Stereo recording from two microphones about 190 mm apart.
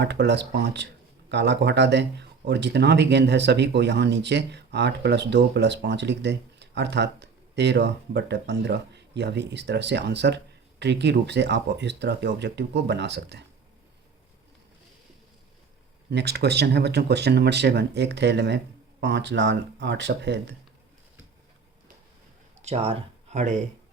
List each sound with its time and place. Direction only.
0.0 s speech: 60° right (ahead or behind)
16.0 s speech: 60° right (ahead or behind)
22.6 s speech: 30° right (ahead or behind)